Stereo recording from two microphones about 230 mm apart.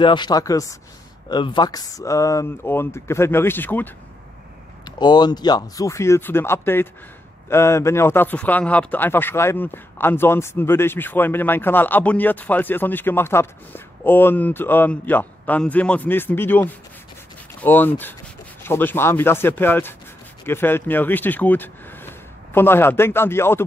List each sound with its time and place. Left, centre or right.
0.0 s speech: centre
4.8 s speech: centre